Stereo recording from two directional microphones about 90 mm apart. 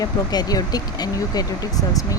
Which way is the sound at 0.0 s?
45° left (ahead or behind).